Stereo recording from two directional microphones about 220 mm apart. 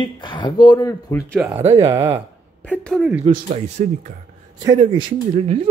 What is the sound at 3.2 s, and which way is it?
Speech, 25° right (ahead or behind).